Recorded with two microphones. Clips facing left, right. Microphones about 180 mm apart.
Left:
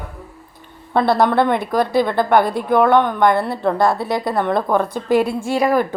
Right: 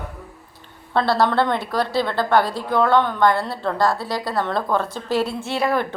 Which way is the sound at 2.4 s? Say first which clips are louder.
Left 4 dB; 55° left (ahead or behind).